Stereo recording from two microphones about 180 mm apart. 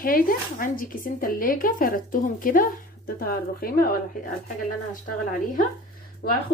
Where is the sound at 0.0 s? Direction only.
50° left (ahead or behind).